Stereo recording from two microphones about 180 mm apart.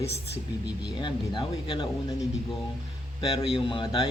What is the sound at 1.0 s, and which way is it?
Speech, 25° left (ahead or behind).